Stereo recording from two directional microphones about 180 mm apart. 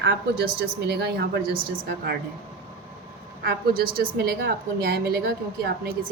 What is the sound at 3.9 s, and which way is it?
A woman's voice, 60° right (ahead or behind).